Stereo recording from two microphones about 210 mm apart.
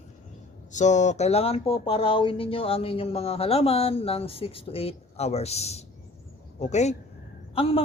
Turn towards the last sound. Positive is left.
turn(degrees=25)  # may be behind; listen again after turning